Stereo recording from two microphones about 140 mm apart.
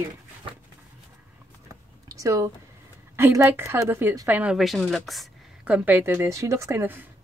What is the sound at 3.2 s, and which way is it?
A woman's voice, 15° right (ahead or behind).